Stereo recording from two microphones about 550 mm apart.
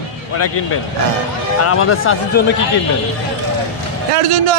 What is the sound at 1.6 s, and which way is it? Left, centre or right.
Speech, left.